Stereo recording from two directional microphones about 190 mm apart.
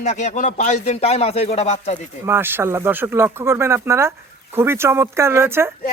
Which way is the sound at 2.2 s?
10° right (ahead or behind).